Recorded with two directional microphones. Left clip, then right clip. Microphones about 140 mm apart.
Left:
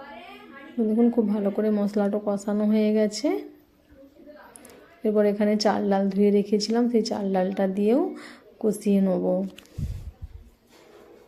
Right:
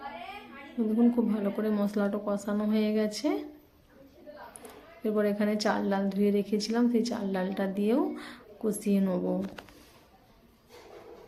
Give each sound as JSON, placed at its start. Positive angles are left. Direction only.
{"t": 0.8, "sound": "speech", "side_deg": 40}
{"t": 5.0, "sound": "speech", "side_deg": 40}